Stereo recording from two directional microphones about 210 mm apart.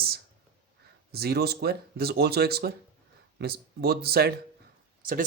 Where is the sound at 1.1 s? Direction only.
50° right (ahead or behind).